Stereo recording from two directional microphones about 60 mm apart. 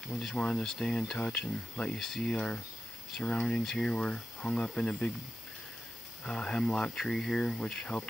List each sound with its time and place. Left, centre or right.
0.3 s speech: centre
6.2 s speech: centre